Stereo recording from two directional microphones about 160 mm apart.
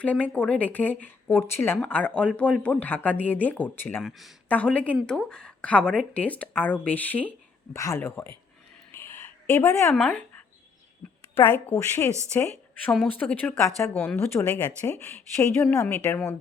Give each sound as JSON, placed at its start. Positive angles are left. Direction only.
{"t": 0.0, "sound": "a woman's voice", "side_deg": 10}
{"t": 8.9, "sound": "a sound", "side_deg": 15}
{"t": 9.9, "sound": "a woman's voice", "side_deg": 5}
{"t": 13.9, "sound": "speech", "side_deg": 5}